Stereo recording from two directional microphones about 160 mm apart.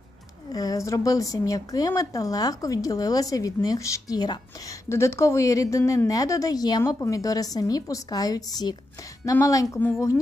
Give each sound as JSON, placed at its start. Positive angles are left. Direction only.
{"t": 0.5, "sound": "a woman's voice", "side_deg": 25}